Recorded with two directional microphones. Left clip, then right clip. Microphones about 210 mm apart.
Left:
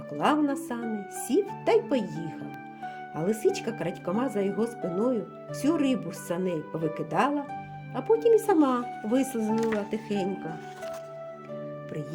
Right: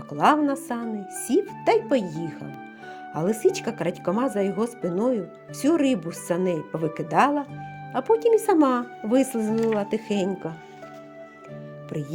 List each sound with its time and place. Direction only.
0.1 s speech: 30° right (ahead or behind)